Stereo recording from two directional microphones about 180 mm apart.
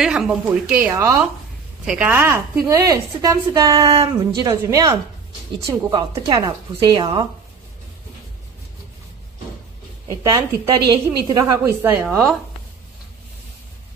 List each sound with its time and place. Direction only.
0.0 s a woman's voice: 5° right (ahead or behind); by 7.2 s 25° right (ahead or behind)
10.0 s a woman's voice: 20° right (ahead or behind)